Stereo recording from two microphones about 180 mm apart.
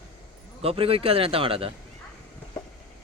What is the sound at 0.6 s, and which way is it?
A man's voice, 30° right (ahead or behind).